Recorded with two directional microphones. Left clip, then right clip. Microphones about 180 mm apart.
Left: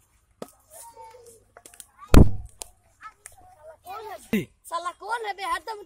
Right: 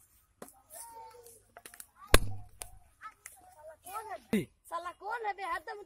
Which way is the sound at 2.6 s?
15° left (ahead or behind).